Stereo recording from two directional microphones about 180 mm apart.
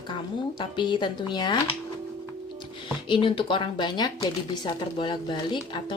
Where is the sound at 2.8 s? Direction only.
30° left (ahead or behind).